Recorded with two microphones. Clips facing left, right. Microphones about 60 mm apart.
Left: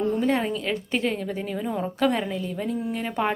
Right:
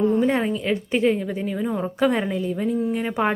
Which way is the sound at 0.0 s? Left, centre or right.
Centre.